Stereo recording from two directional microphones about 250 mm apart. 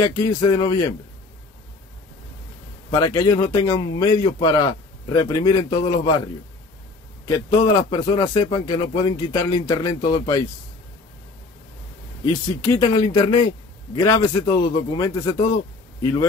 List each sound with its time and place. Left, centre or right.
0.0 s a man's voice: centre
2.9 s a man's voice: centre
12.3 s a man's voice: centre